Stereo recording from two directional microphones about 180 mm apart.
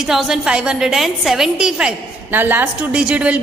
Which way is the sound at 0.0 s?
Centre (ahead or behind).